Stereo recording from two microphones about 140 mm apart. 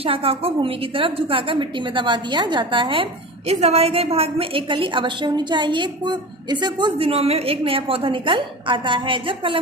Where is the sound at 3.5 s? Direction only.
50° right (ahead or behind).